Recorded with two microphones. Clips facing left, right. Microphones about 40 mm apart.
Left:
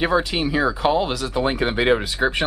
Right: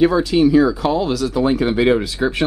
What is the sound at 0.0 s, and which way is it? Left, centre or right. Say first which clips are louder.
Speech: right 6 dB; centre.